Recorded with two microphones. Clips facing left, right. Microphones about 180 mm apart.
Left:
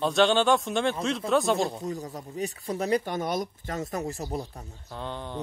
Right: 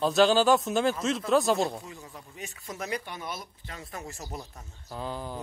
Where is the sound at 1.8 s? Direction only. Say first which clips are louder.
Left 11 dB; 40° left (ahead or behind).